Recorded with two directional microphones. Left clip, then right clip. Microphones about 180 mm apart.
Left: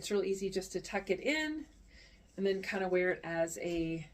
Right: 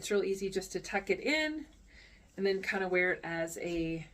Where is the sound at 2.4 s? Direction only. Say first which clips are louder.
Right 2 dB; 15° right (ahead or behind).